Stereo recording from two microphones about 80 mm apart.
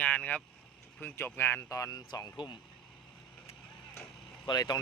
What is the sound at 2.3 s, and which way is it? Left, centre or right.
Speech, left.